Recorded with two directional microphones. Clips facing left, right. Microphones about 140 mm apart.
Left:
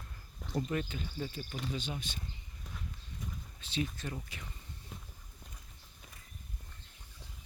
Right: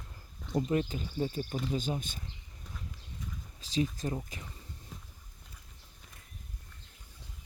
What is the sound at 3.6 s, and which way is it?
Speech, 35° right (ahead or behind).